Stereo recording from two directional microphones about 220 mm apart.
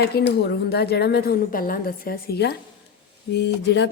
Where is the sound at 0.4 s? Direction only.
45° left (ahead or behind).